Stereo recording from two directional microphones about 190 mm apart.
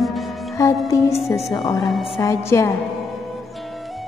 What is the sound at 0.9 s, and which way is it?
Music, 15° left (ahead or behind).